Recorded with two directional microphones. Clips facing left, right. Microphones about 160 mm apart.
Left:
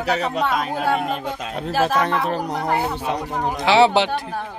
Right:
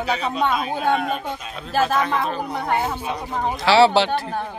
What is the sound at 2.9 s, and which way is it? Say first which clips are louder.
Speech: left 3 dB; 75° left (ahead or behind).